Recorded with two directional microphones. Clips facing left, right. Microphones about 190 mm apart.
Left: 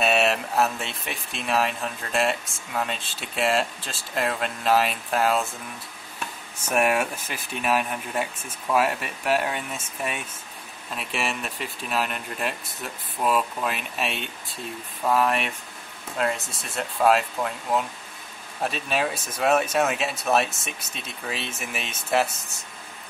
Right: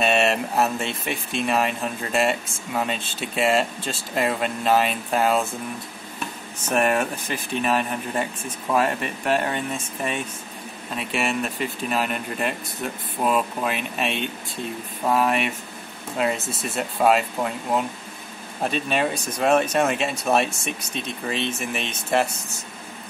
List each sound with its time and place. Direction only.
0.0 s speech: centre (ahead or behind)
6.7 s speech: 5° left (ahead or behind)